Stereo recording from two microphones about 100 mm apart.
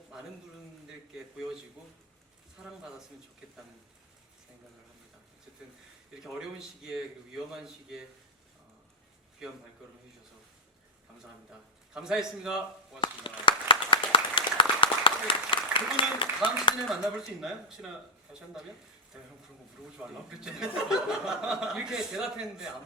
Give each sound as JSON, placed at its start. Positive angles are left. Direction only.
{"t": 1.4, "sound": "a sound", "side_deg": -5}
{"t": 2.6, "sound": "speech", "side_deg": -5}
{"t": 6.1, "sound": "speech", "side_deg": -5}
{"t": 11.9, "sound": "speech", "side_deg": -5}
{"t": 13.0, "sound": "a sound", "side_deg": 60}
{"t": 16.9, "sound": "speech", "side_deg": -5}
{"t": 20.4, "sound": "speech", "side_deg": -5}